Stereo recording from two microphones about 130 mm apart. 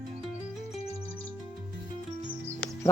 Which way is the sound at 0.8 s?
50° left (ahead or behind).